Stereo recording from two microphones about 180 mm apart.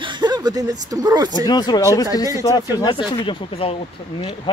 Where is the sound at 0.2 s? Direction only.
25° right (ahead or behind).